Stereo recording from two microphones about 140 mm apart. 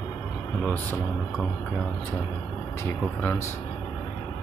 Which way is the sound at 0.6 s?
10° left (ahead or behind).